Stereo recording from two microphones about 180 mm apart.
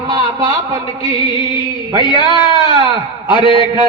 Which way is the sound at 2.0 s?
25° left (ahead or behind).